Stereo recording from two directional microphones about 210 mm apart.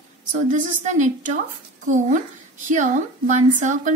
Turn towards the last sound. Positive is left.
turn(degrees=-35)  # may be behind; listen again after turning